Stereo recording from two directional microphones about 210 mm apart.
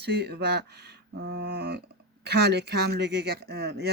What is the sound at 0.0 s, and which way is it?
Speech, 50° right (ahead or behind).